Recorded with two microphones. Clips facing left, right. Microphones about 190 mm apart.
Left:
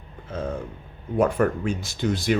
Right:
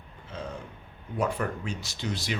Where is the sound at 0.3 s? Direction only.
50° left (ahead or behind).